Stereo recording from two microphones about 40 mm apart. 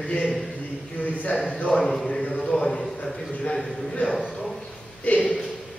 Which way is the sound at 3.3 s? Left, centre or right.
Left.